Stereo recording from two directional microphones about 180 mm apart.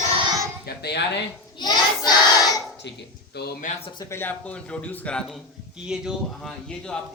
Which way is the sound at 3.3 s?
65° left (ahead or behind).